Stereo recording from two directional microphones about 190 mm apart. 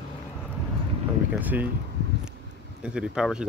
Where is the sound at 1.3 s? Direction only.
10° right (ahead or behind).